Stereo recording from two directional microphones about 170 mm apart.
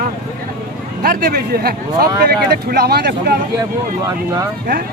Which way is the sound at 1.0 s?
60° right (ahead or behind).